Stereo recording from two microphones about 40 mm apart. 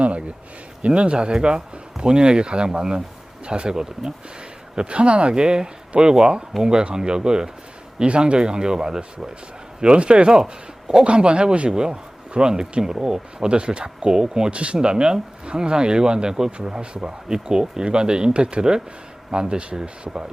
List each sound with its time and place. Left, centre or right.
0.0 s speech: right
5.3 s speech: centre
9.8 s speech: right
11.0 s speech: right
14.5 s speech: right
16.5 s speech: right